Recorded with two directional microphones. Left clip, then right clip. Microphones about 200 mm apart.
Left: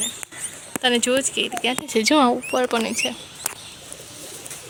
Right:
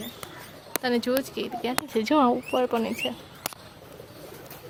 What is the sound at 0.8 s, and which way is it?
Speech, 5° left (ahead or behind).